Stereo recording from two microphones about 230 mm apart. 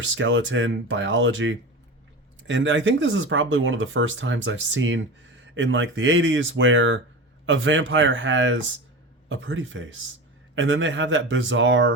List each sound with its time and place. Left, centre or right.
0.0 s speech: right